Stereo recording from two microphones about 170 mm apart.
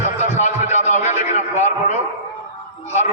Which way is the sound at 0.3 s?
45° left (ahead or behind).